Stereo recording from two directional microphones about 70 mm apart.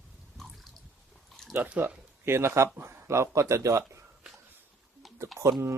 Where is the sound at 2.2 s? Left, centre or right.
Right.